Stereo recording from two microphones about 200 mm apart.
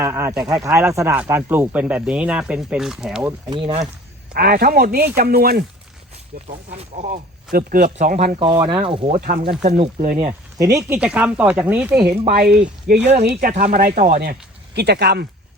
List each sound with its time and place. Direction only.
0.0 s speech: 15° right (ahead or behind)
4.4 s speech: 50° right (ahead or behind)
6.5 s speech: 35° right (ahead or behind)
8.4 s speech: 25° right (ahead or behind)
10.6 s speech: 15° right (ahead or behind)
12.3 s speech: 50° right (ahead or behind)
13.4 s speech: 40° right (ahead or behind); by 15.3 s 55° right (ahead or behind)